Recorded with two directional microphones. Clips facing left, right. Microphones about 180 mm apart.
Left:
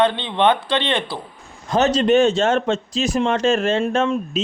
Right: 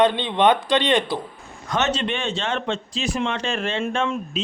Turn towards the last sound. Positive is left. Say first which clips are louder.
# left 5 dB
turn(degrees=40)  # may be behind; listen again after turning